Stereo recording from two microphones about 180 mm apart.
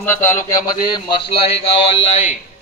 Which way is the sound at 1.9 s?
35° left (ahead or behind).